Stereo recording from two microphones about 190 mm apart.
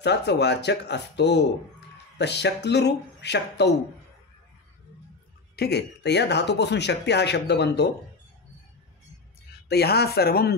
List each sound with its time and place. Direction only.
0.0 s speech: 65° left (ahead or behind)
5.6 s speech: 60° left (ahead or behind)
9.7 s speech: 55° left (ahead or behind)